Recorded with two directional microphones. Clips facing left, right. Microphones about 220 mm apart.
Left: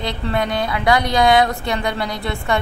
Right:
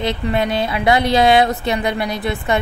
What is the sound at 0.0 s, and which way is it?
A woman's voice, 20° right (ahead or behind).